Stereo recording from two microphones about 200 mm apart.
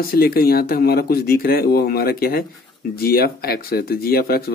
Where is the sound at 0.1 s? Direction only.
50° left (ahead or behind).